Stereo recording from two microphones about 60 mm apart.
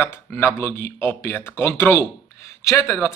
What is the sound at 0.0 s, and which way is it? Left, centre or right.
Speech, left.